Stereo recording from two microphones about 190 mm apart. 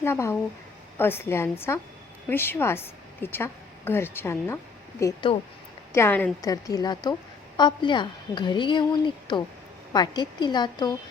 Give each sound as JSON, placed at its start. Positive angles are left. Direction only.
{"t": 0.0, "sound": "a woman's voice", "side_deg": 15}
{"t": 6.4, "sound": "a woman's voice", "side_deg": 20}